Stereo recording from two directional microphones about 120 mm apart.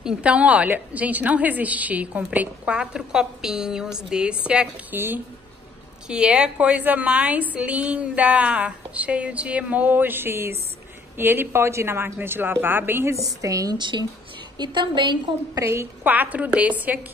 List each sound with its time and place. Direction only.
0.0 s a woman's voice: 10° right (ahead or behind); by 15.6 s 40° right (ahead or behind)
15.6 s a woman's voice: 20° right (ahead or behind)